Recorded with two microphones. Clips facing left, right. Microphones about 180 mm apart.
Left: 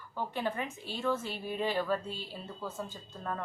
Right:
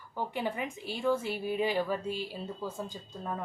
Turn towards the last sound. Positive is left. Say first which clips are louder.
# right 1 dB
turn(degrees=-15)  # may be behind; listen again after turning